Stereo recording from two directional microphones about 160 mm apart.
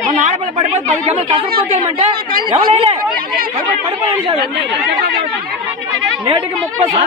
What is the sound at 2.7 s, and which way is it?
Speech, 40° right (ahead or behind).